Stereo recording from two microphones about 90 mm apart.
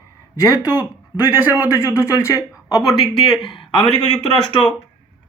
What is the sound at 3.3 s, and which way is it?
Speech, 60° left (ahead or behind).